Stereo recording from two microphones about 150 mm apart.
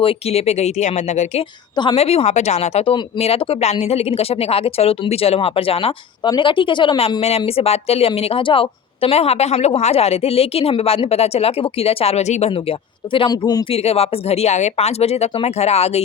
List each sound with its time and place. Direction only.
0.0 s speech: 40° left (ahead or behind)
1.7 s a woman's voice: 30° left (ahead or behind)
2.0 s speech: 40° left (ahead or behind)
13.1 s speech: 30° left (ahead or behind)
13.7 s speech: 40° left (ahead or behind)